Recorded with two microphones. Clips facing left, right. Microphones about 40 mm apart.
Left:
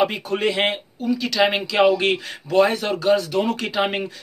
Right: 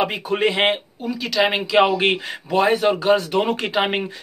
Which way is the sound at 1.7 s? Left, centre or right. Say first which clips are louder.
Right 1 dB; right.